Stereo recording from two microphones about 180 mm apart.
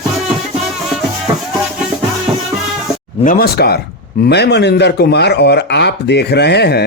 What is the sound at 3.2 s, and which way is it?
Speech, 50° left (ahead or behind).